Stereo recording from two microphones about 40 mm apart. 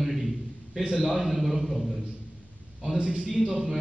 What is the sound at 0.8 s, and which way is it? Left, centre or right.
Speech, right.